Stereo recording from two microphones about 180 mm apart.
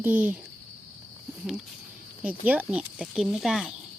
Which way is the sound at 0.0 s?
10° right (ahead or behind).